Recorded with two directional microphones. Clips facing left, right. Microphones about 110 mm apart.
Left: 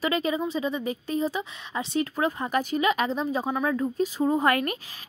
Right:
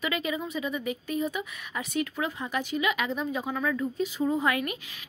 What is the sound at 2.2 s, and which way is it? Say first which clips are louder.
Speech: left 5 dB; 45° left (ahead or behind).